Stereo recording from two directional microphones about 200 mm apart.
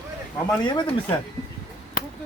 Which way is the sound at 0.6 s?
20° left (ahead or behind).